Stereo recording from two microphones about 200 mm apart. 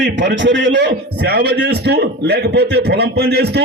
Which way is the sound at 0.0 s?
65° right (ahead or behind).